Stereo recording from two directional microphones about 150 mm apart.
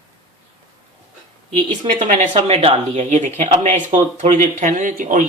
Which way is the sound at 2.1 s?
45° right (ahead or behind).